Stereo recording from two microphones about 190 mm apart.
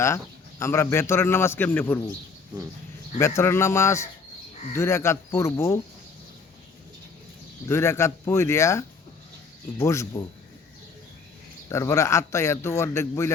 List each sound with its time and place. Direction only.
0.6 s a man's voice: 15° left (ahead or behind)
3.2 s a man's voice: 15° left (ahead or behind)
7.7 s a man's voice: 15° left (ahead or behind)
11.7 s a man's voice: 15° left (ahead or behind)